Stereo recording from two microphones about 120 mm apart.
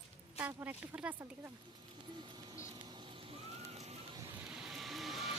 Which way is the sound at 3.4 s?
60° right (ahead or behind).